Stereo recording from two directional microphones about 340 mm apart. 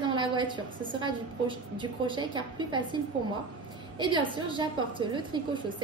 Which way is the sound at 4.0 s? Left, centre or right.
Centre.